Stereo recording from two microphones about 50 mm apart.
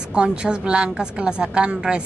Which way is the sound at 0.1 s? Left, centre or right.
Centre.